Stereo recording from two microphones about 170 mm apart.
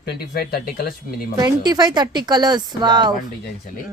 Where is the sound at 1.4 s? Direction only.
25° right (ahead or behind).